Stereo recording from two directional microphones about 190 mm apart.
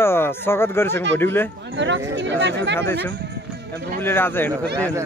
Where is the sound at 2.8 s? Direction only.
10° left (ahead or behind).